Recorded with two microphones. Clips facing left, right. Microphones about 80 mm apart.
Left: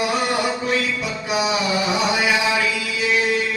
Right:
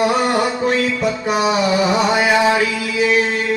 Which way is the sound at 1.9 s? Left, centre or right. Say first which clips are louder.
Right 5 dB; right.